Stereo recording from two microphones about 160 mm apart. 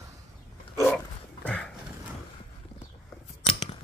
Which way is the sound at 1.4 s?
10° left (ahead or behind).